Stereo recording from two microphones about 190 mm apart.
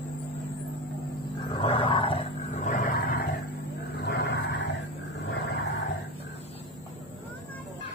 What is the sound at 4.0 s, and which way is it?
Vehicle, 60° left (ahead or behind).